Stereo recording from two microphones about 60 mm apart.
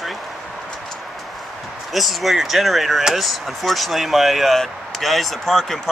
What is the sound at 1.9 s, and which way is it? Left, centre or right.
Speech, centre.